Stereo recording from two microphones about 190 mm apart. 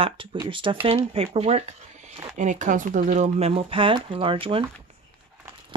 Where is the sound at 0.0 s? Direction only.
25° right (ahead or behind).